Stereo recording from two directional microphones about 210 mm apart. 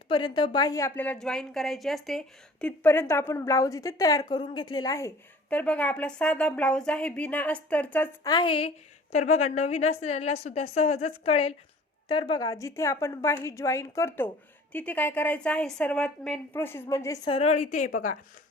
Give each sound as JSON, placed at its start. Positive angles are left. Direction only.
{"t": 0.1, "sound": "a woman's voice", "side_deg": 20}
{"t": 8.3, "sound": "a woman's voice", "side_deg": 25}